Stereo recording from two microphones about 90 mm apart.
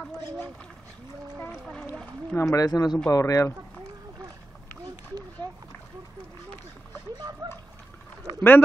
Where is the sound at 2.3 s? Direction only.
35° left (ahead or behind).